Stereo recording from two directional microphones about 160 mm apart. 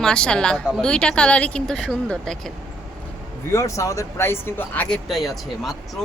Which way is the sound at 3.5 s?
20° left (ahead or behind).